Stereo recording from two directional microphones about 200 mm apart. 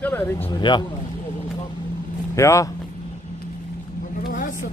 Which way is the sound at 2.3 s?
15° left (ahead or behind).